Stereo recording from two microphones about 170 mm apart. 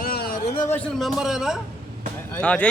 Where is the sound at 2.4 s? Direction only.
10° left (ahead or behind).